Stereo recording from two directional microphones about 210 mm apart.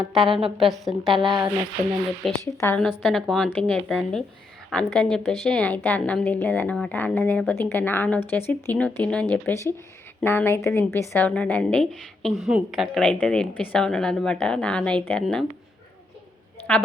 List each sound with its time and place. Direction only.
0.3 s a woman's voice: 25° right (ahead or behind)
0.7 s a woman's voice: centre (ahead or behind)
1.1 s a woman's voice: 20° right (ahead or behind)
2.2 s a woman's voice: centre (ahead or behind)
16.7 s a woman's voice: 5° left (ahead or behind)